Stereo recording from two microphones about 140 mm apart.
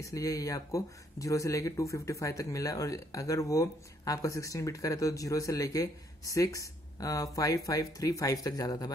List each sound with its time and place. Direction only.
0.0 s speech: 25° left (ahead or behind)